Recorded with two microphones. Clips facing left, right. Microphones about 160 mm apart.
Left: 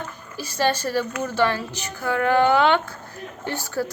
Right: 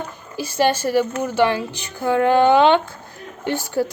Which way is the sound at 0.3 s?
20° right (ahead or behind).